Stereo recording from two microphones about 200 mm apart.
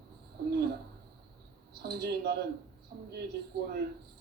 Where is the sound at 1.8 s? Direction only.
50° right (ahead or behind).